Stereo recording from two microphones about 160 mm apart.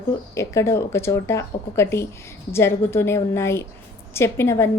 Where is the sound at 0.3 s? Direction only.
15° left (ahead or behind).